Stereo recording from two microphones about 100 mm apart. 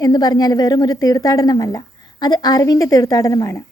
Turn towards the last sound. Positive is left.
turn(degrees=35)  # may be behind; listen again after turning